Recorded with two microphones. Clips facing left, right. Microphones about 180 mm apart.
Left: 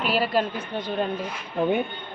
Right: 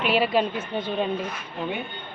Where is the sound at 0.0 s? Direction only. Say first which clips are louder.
Right 2 dB; 40° left (ahead or behind).